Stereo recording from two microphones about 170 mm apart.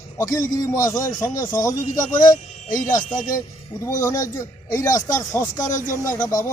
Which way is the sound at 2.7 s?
50° left (ahead or behind).